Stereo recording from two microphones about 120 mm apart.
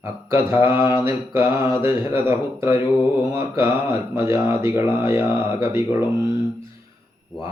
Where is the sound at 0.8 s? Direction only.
20° right (ahead or behind).